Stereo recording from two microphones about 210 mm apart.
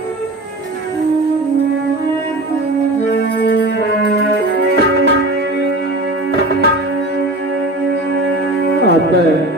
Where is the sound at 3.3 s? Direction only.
50° left (ahead or behind).